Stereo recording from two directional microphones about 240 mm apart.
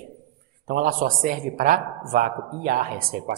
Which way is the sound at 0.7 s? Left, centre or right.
Right.